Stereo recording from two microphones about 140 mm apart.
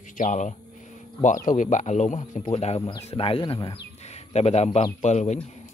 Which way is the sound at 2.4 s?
50° left (ahead or behind).